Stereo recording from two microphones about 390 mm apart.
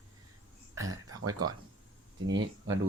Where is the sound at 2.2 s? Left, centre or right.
Right.